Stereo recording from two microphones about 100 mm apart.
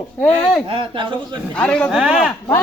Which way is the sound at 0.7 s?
65° right (ahead or behind).